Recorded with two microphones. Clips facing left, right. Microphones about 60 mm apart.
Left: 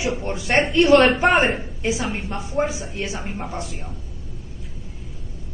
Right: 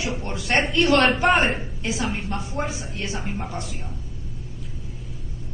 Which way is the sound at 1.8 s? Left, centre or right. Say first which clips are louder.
Left 3 dB; centre.